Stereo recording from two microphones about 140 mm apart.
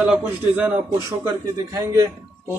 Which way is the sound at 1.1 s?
25° right (ahead or behind).